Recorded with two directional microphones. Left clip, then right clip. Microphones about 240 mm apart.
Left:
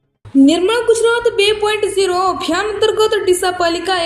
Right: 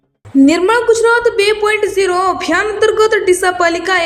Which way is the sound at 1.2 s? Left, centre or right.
Centre.